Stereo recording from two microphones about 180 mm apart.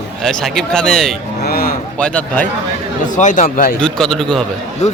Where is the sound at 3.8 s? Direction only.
5° left (ahead or behind).